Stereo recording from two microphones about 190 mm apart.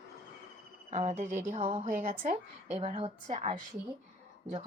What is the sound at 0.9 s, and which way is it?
Speech, 40° right (ahead or behind).